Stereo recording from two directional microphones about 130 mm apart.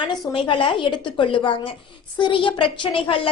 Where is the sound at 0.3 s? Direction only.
40° left (ahead or behind).